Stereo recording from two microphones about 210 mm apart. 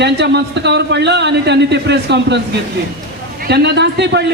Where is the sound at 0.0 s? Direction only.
55° right (ahead or behind).